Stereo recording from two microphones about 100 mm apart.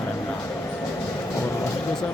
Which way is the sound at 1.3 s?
30° left (ahead or behind).